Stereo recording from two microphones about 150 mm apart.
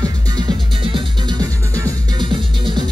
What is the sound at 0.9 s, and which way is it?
Music, 25° right (ahead or behind).